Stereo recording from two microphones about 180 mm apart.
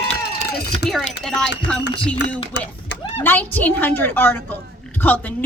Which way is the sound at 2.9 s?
75° left (ahead or behind).